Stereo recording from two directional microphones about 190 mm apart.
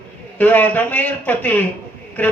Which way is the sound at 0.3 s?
10° left (ahead or behind).